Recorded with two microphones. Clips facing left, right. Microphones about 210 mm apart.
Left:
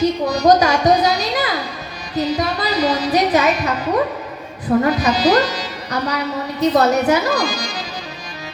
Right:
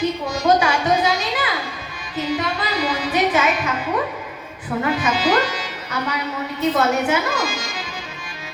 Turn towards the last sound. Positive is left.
turn(degrees=40)  # may be behind; listen again after turning